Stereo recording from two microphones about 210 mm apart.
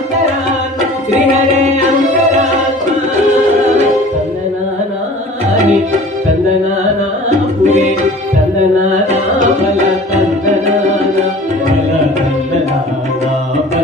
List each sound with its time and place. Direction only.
7.2 s music: 30° right (ahead or behind)